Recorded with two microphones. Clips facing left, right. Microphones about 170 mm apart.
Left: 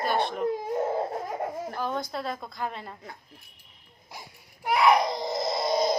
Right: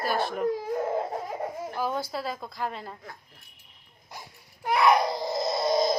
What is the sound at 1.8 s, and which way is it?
A child's voice, 5° right (ahead or behind).